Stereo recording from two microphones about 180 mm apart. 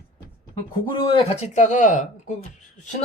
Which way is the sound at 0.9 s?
25° left (ahead or behind).